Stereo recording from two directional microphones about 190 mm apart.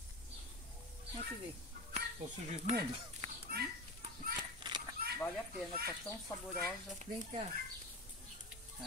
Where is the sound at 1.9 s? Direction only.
35° right (ahead or behind).